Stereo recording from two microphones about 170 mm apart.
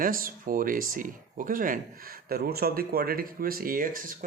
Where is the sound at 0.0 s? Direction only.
55° right (ahead or behind).